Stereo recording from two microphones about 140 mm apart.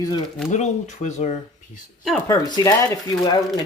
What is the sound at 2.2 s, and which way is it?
Speech, 25° left (ahead or behind).